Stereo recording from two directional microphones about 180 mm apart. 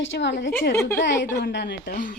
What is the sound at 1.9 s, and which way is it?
Speech, 45° left (ahead or behind).